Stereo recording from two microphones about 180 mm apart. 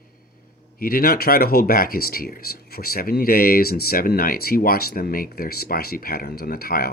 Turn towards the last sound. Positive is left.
turn(degrees=55)  # may be behind; listen again after turning